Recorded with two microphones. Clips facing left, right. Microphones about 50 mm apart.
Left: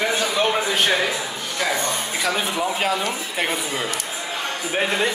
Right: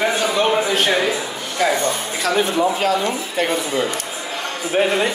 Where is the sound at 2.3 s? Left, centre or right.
Centre.